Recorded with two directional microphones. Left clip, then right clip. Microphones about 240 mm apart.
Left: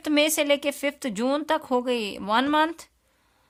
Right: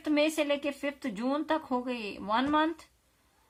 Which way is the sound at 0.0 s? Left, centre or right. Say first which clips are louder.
Left 5 dB; left.